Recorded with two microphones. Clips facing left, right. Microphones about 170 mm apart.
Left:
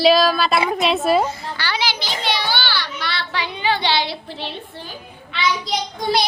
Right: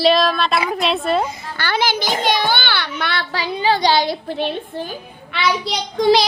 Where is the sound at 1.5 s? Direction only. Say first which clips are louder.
Right 8 dB; 50° right (ahead or behind).